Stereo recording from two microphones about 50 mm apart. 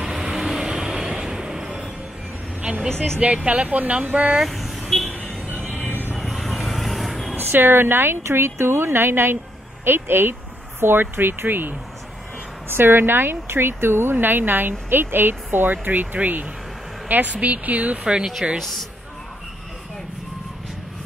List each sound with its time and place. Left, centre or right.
0.0 s vehicle: centre
2.6 s vehicle: right
3.4 s a woman's voice: right
4.4 s vehicle: centre
5.5 s music: right
6.1 s vehicle: centre
7.3 s speech: right
8.3 s a woman's voice: right
18.6 s speech: centre